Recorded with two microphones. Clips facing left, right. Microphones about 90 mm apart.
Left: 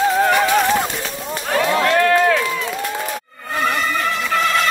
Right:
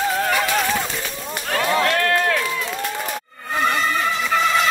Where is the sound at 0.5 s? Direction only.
45° left (ahead or behind).